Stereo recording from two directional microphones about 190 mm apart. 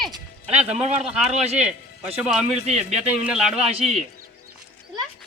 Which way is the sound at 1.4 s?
35° right (ahead or behind).